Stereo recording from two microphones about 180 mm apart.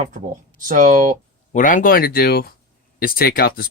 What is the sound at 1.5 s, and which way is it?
Speech, 45° left (ahead or behind).